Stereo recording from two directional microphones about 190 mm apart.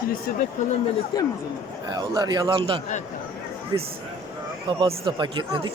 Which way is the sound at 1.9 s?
20° right (ahead or behind).